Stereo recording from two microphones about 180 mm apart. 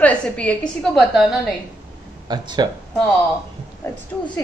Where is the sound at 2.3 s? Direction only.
25° right (ahead or behind).